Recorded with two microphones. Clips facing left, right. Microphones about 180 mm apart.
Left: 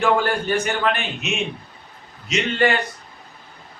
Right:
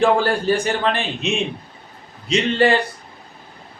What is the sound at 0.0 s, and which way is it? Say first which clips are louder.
A man's voice: right 3 dB; 30° right (ahead or behind).